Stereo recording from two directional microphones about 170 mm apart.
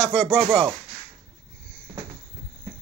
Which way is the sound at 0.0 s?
5° left (ahead or behind).